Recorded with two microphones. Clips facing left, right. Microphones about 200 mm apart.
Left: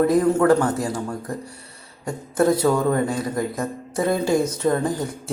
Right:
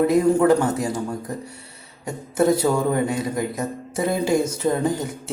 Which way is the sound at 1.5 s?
25° right (ahead or behind).